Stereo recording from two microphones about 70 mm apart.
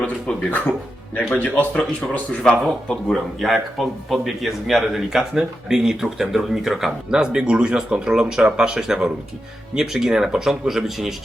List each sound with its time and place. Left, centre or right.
0.0 s a man's voice: centre
2.4 s speech: centre